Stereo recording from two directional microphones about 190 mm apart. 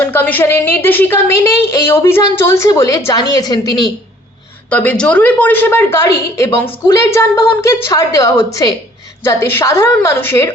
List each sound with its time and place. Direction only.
0.0 s a woman's voice: 10° left (ahead or behind)
4.7 s a woman's voice: 5° left (ahead or behind)